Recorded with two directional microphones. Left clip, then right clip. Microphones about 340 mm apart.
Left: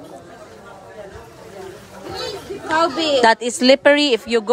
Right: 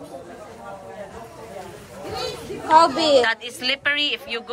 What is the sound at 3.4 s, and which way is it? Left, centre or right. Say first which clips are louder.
Speech: left 10 dB; centre.